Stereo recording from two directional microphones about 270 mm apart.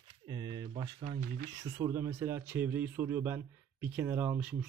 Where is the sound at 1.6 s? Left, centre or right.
Centre.